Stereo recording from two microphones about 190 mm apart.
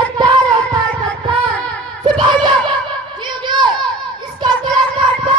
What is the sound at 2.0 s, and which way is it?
Crowd, 25° right (ahead or behind).